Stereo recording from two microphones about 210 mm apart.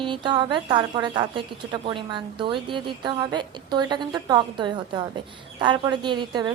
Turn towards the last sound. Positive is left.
turn(degrees=-20)  # may be behind; listen again after turning